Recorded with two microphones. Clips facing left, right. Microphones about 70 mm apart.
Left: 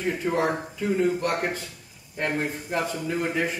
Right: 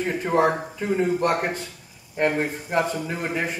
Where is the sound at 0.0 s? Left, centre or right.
Right.